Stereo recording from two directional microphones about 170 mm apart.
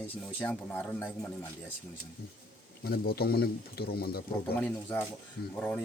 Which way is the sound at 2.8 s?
65° left (ahead or behind).